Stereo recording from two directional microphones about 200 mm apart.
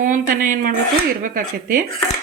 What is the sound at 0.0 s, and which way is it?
Speech, 40° right (ahead or behind).